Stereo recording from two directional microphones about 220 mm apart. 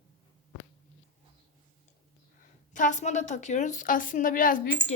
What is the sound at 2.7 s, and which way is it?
A woman's voice, 35° left (ahead or behind).